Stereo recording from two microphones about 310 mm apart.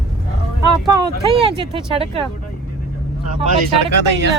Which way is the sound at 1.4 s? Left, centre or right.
Centre.